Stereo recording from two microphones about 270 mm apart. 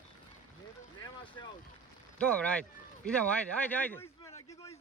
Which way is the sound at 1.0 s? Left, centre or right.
Centre.